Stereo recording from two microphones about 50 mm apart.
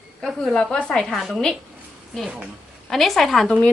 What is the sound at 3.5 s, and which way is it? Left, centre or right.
Speech, left.